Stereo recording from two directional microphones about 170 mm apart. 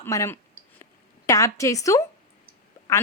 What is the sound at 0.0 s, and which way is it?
A woman's voice, 15° left (ahead or behind).